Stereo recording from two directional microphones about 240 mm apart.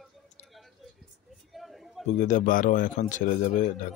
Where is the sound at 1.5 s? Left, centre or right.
Centre.